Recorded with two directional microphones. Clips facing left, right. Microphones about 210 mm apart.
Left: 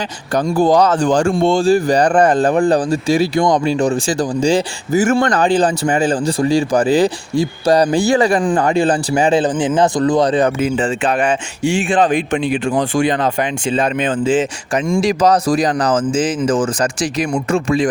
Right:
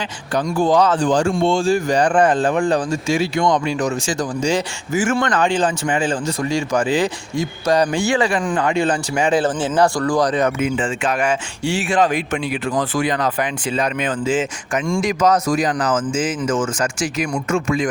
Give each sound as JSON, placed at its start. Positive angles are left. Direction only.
{"t": 0.4, "sound": "speech", "side_deg": 35}
{"t": 9.4, "sound": "speech", "side_deg": 15}